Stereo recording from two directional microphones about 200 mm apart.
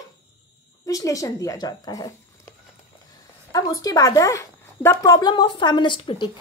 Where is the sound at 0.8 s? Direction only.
15° left (ahead or behind).